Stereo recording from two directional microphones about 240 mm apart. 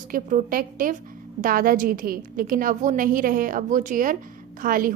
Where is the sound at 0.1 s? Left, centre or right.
Right.